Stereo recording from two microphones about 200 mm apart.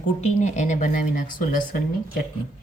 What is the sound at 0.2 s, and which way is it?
Speech, 35° left (ahead or behind).